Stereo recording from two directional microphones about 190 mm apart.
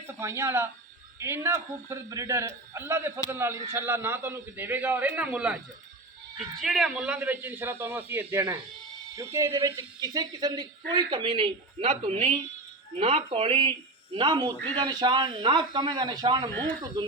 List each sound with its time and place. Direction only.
0.2 s a man's voice: 15° right (ahead or behind)
6.6 s a man's voice: centre (ahead or behind); by 16.5 s 25° right (ahead or behind)
16.5 s speech: 10° left (ahead or behind)
16.8 s speech: 20° right (ahead or behind)